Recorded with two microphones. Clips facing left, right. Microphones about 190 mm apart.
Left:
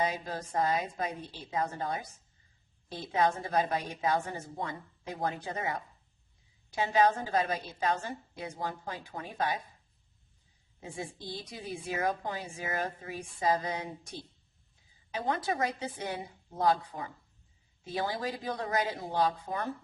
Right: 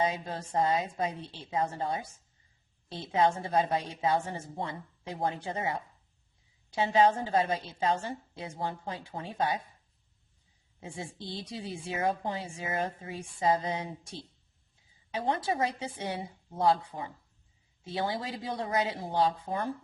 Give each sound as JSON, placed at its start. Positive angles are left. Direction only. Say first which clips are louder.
{"t": 0.0, "sound": "a woman's voice", "louder": "right 1 dB", "side_deg": -30}
{"t": 10.8, "sound": "a woman's voice", "louder": "even", "side_deg": -30}
{"t": 15.3, "sound": "a woman's voice", "louder": "right 1 dB", "side_deg": -25}